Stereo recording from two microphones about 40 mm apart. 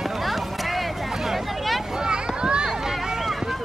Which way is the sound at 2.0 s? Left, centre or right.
Right.